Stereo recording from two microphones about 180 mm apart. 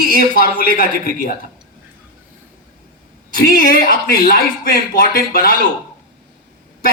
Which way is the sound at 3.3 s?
55° left (ahead or behind).